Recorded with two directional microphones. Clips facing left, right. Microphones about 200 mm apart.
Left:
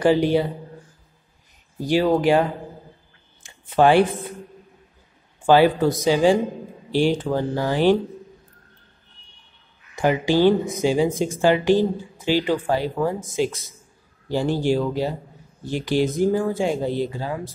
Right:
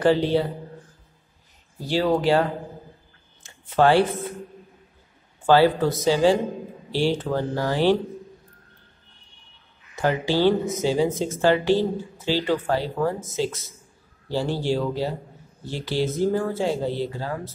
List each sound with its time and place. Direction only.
0.0 s speech: 15° left (ahead or behind)
1.8 s speech: 15° left (ahead or behind)
3.4 s speech: 15° left (ahead or behind)
5.5 s speech: 15° left (ahead or behind)
9.9 s speech: 15° left (ahead or behind)